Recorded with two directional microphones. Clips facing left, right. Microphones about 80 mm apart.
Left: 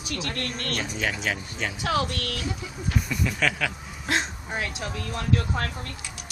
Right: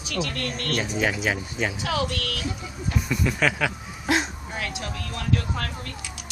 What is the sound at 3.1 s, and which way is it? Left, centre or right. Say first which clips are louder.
Speech: right 4 dB; centre.